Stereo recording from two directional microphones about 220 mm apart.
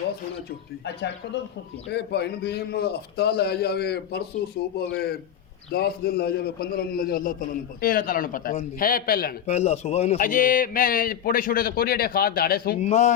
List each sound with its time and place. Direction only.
0.9 s a man's voice: 50° left (ahead or behind)
12.8 s a man's voice: 30° left (ahead or behind)